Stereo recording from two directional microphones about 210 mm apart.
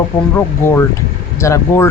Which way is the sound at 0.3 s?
10° left (ahead or behind).